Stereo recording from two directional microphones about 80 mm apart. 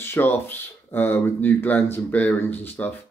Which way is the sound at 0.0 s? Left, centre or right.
Left.